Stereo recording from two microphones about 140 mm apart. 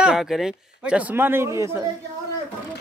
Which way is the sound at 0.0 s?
5° right (ahead or behind).